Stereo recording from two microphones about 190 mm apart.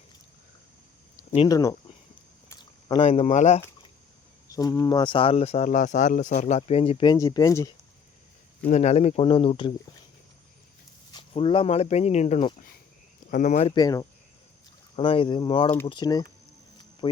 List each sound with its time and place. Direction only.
1.1 s a sound: 35° left (ahead or behind)
1.5 s speech: 20° left (ahead or behind)
2.5 s a sound: 25° left (ahead or behind)
3.0 s speech: 35° left (ahead or behind)
4.4 s speech: 20° left (ahead or behind)
8.6 s speech: 35° left (ahead or behind)
11.1 s speech: 25° left (ahead or behind)
13.7 s speech: 20° left (ahead or behind)